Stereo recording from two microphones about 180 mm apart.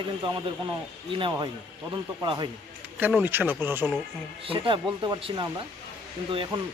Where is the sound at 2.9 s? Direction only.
10° right (ahead or behind).